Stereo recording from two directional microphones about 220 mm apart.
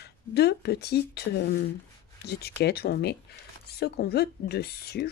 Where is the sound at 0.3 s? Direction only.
50° left (ahead or behind).